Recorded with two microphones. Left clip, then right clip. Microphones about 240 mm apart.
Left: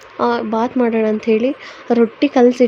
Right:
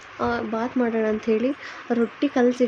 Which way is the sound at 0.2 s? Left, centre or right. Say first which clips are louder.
Left 8 dB; left.